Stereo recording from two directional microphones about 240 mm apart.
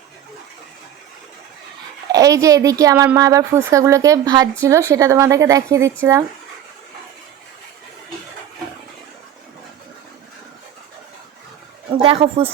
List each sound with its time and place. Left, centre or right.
2.1 s a woman's voice: centre
12.0 s speech: right